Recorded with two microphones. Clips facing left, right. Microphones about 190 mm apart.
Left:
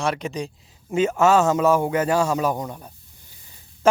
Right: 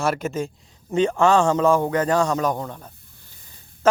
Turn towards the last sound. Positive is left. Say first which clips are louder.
# even
turn(degrees=10)  # may be behind; listen again after turning